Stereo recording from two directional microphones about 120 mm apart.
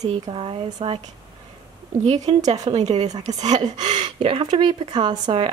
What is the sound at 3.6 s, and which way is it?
Speech, 35° right (ahead or behind).